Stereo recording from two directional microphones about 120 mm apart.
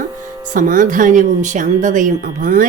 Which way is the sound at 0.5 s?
90° right.